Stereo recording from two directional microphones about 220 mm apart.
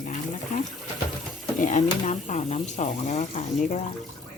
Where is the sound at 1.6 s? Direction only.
35° left (ahead or behind).